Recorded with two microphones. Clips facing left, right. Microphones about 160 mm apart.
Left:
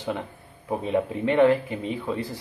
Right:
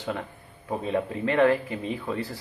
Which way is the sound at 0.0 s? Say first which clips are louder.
Left 2 dB; 15° left (ahead or behind).